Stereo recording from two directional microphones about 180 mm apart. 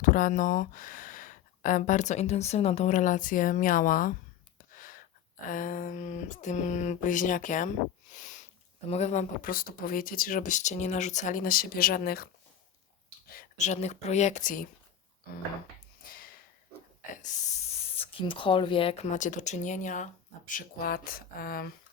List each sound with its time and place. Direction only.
0.0 s speech: 50° left (ahead or behind)
4.5 s gasp: 50° left (ahead or behind)
5.5 s speech: 50° left (ahead or behind)
8.1 s sniff: 45° left (ahead or behind)
8.9 s speech: 40° left (ahead or behind)
9.4 s speech: 50° left (ahead or behind)
13.3 s speech: 45° left (ahead or behind)
16.0 s a sound: 55° left (ahead or behind)
17.2 s speech: 40° left (ahead or behind)